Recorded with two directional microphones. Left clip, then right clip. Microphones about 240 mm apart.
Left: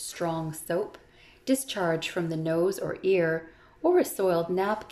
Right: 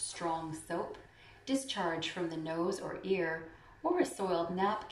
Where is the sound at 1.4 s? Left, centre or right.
Left.